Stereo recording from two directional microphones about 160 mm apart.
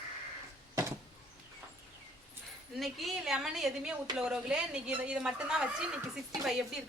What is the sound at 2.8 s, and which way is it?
A woman's voice, centre (ahead or behind).